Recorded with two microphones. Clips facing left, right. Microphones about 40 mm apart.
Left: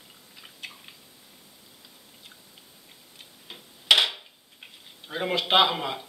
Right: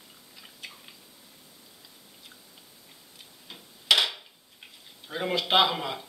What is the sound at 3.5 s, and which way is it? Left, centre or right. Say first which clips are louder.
Dishes: left 3 dB; centre.